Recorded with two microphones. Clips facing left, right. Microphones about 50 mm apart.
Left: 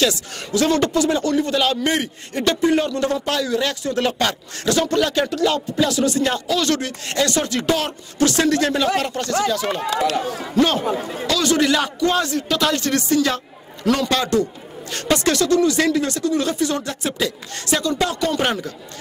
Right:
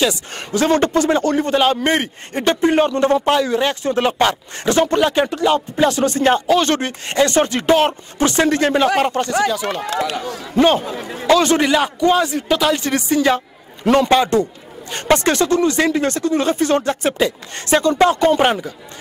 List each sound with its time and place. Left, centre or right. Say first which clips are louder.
0.3 s a man's voice: right 2 dB; right
9.5 s music: right 1 dB; centre
10.5 s a man's voice: right 4 dB; right
11.7 s music: right 4 dB; centre
13.8 s a man's voice: right 6 dB; right
16.9 s a man's voice: right 5 dB; right